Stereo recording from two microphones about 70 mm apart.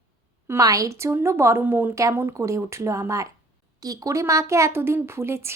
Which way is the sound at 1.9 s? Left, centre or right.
Right.